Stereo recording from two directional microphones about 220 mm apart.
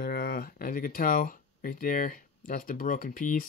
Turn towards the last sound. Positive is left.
turn(degrees=35)  # may be behind; listen again after turning